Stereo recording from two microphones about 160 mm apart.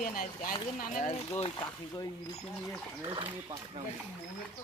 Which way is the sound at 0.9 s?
50° left (ahead or behind).